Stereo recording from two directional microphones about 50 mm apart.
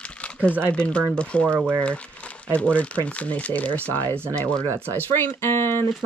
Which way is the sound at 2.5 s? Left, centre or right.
Left.